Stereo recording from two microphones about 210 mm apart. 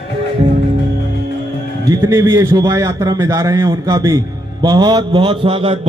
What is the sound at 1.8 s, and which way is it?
A man's voice, 15° right (ahead or behind).